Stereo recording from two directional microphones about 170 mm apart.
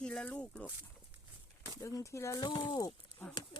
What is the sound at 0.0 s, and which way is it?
Speech, 5° left (ahead or behind).